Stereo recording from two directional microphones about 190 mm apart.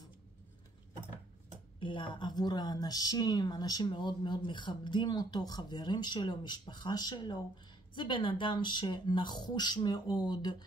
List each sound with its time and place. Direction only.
1.8 s a woman's voice: 25° left (ahead or behind)